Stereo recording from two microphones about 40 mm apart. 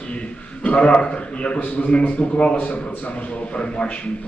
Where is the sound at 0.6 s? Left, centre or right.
Left.